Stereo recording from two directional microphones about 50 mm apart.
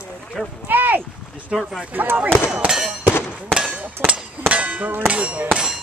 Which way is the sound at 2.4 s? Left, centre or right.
Centre.